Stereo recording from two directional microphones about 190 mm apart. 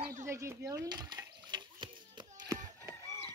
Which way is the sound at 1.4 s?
25° right (ahead or behind).